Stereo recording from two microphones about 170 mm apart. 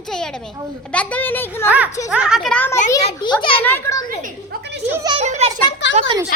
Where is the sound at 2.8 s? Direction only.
25° left (ahead or behind).